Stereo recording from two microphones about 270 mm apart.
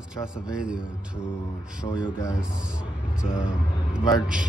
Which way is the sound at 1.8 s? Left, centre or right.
Centre.